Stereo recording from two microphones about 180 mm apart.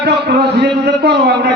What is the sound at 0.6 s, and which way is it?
Speech, 65° right (ahead or behind).